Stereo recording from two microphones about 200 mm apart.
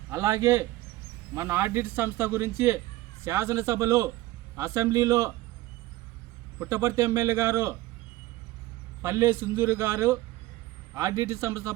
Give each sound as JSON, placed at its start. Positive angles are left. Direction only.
{"t": 0.1, "sound": "speech", "side_deg": -15}
{"t": 6.6, "sound": "speech", "side_deg": -15}
{"t": 9.0, "sound": "speech", "side_deg": -15}